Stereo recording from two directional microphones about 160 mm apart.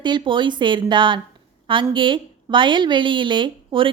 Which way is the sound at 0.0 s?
30° right (ahead or behind).